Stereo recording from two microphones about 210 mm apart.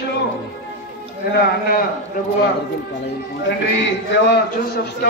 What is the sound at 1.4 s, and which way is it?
Speech, 50° left (ahead or behind).